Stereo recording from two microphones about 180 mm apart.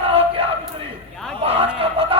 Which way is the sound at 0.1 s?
35° right (ahead or behind).